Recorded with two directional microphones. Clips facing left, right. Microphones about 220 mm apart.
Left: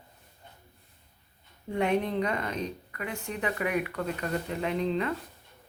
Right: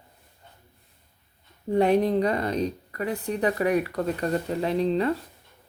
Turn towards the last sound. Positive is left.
turn(degrees=-35)  # may be behind; listen again after turning